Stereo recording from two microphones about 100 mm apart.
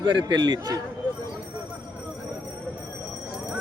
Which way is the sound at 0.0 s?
50° right (ahead or behind).